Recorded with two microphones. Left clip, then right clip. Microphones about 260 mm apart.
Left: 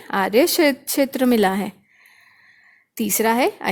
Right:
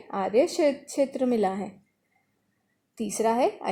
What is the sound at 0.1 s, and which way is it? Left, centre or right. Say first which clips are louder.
A woman's voice: left 6 dB; left.